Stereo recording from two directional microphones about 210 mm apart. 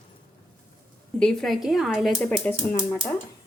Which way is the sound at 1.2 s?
5° left (ahead or behind).